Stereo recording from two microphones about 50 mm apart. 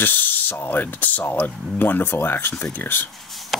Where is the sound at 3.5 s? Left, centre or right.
Centre.